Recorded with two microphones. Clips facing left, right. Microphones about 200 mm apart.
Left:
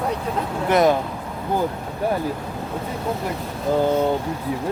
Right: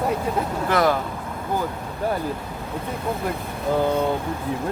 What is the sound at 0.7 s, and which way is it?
Speech, 20° left (ahead or behind).